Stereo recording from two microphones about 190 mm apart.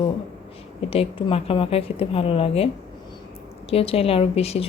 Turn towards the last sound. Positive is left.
turn(degrees=30)  # may be behind; listen again after turning